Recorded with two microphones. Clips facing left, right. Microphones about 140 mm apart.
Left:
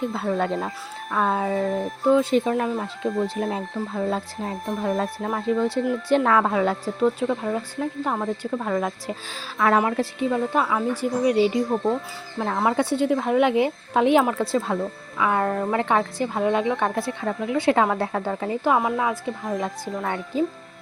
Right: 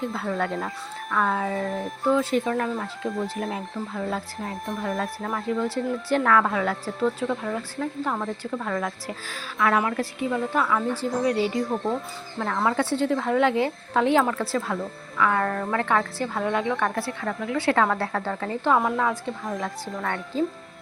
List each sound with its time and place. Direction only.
0.0 s a woman's voice: 20° left (ahead or behind)
11.7 s speech: 5° left (ahead or behind)
12.4 s a woman's voice: 20° left (ahead or behind)
19.5 s a woman's voice: 20° left (ahead or behind)